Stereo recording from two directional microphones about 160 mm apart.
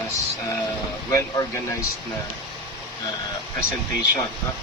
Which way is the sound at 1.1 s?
20° left (ahead or behind).